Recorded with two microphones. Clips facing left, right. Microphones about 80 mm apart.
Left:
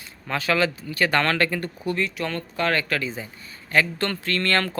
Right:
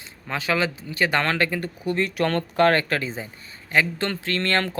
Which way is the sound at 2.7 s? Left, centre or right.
Right.